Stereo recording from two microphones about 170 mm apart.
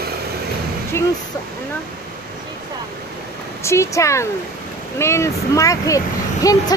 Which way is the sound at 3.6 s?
15° left (ahead or behind).